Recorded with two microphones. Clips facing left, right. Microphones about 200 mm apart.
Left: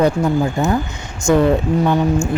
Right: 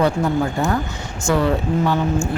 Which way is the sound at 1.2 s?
20° left (ahead or behind).